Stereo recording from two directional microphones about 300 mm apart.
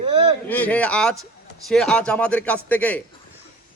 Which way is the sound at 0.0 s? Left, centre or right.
Centre.